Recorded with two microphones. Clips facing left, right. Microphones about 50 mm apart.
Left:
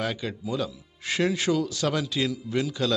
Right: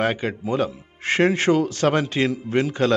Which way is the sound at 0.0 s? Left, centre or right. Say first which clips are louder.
Right 7 dB; right.